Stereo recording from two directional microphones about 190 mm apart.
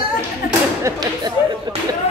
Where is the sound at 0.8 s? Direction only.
20° right (ahead or behind).